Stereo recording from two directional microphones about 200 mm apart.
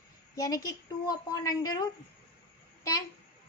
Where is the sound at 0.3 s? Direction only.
20° left (ahead or behind).